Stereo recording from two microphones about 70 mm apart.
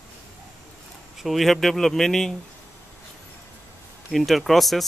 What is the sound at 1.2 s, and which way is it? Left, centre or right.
Speech, centre.